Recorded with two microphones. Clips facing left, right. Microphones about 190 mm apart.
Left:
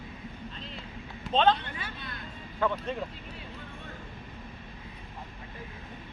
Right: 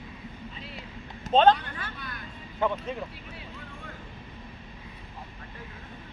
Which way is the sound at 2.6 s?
20° right (ahead or behind).